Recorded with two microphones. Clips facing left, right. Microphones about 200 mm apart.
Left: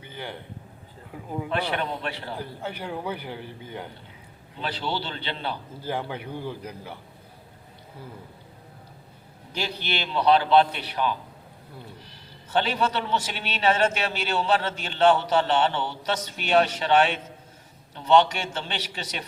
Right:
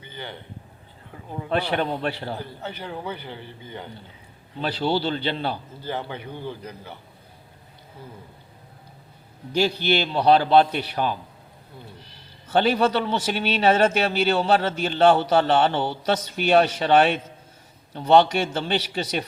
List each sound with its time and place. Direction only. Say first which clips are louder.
0.0 s a sound: even; 5° left (ahead or behind)
1.5 s a man's voice: right 5 dB; 35° right (ahead or behind)
2.6 s a man's voice: left 1 dB; 10° left (ahead or behind)
4.6 s a man's voice: right 7 dB; 35° right (ahead or behind)
5.8 s a man's voice: left 1 dB; 5° left (ahead or behind)
9.6 s a man's voice: right 9 dB; 35° right (ahead or behind)
12.5 s a man's voice: right 5 dB; 40° right (ahead or behind)